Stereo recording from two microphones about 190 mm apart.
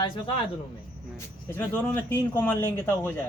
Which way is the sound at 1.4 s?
10° left (ahead or behind).